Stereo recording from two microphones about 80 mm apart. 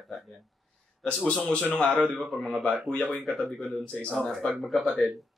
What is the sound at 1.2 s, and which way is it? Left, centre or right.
Speech, centre.